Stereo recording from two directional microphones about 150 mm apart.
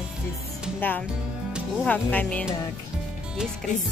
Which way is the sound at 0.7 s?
10° left (ahead or behind).